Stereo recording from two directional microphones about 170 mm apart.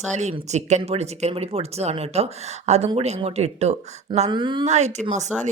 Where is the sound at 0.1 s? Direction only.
40° right (ahead or behind).